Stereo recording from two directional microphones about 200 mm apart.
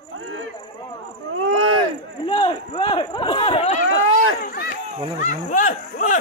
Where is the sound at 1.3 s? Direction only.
90° right.